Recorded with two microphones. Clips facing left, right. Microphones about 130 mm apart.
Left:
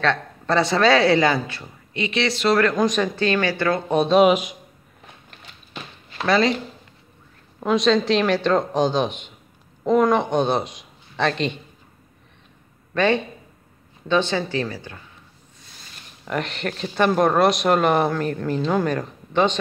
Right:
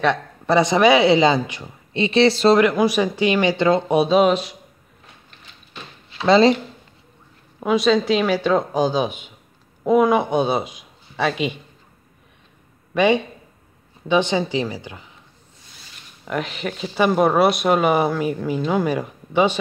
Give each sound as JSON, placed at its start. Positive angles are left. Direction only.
{"t": 0.0, "sound": "a man's voice", "side_deg": -15}
{"t": 2.0, "sound": "speech", "side_deg": -30}
{"t": 2.5, "sound": "a man's voice", "side_deg": -10}
{"t": 4.0, "sound": "speech", "side_deg": 0}
{"t": 4.3, "sound": "a man's voice", "side_deg": 15}
{"t": 6.2, "sound": "speech", "side_deg": -25}
{"t": 7.6, "sound": "a man's voice", "side_deg": -5}
{"t": 12.9, "sound": "a man's voice", "side_deg": -15}
{"t": 16.3, "sound": "speech", "side_deg": 0}